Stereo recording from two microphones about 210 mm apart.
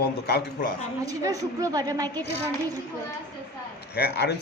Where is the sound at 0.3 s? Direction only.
50° left (ahead or behind).